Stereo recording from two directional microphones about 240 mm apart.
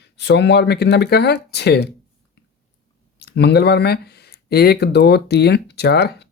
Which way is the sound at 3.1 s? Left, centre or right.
Left.